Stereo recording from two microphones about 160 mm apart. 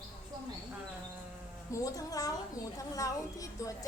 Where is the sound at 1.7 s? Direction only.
20° left (ahead or behind).